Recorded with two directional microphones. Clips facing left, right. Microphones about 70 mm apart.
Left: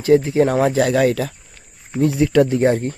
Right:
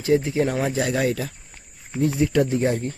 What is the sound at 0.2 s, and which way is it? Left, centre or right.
Speech, left.